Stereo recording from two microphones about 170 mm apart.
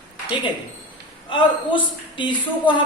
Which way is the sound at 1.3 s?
30° left (ahead or behind).